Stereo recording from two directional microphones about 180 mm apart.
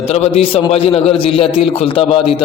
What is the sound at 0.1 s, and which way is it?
A man's voice, 35° left (ahead or behind).